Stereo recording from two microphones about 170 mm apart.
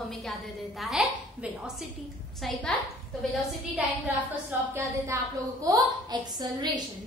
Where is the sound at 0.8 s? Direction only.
Centre (ahead or behind).